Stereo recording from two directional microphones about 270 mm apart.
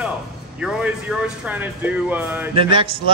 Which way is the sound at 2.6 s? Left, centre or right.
Centre.